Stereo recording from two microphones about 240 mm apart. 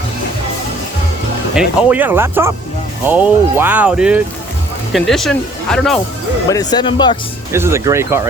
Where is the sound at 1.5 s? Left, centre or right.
Centre.